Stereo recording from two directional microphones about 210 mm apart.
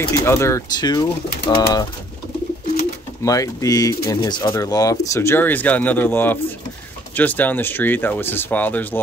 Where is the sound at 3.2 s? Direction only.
15° left (ahead or behind).